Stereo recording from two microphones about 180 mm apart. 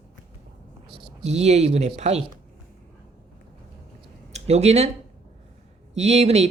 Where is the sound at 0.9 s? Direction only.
35° right (ahead or behind).